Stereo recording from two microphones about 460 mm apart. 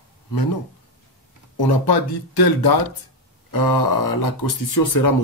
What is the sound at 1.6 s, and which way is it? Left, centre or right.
Speech, left.